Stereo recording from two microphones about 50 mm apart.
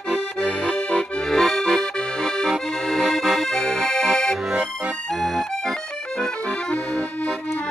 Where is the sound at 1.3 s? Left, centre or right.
Centre.